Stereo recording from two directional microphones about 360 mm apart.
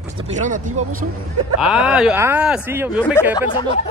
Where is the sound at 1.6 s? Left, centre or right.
Centre.